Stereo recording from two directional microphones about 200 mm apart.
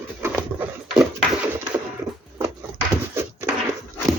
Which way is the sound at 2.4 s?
10° right (ahead or behind).